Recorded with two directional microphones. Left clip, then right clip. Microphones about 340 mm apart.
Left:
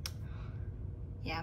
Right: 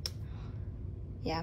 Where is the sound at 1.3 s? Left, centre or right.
Centre.